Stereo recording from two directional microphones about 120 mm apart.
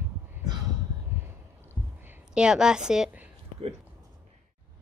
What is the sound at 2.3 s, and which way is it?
Speech, 5° right (ahead or behind).